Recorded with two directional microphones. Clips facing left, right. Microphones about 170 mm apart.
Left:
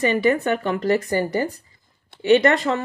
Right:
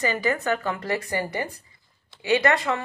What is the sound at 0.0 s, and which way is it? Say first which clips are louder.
Speech: left 6 dB; 25° left (ahead or behind).